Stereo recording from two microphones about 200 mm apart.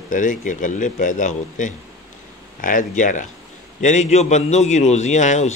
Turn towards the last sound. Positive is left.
turn(degrees=35)  # may be behind; listen again after turning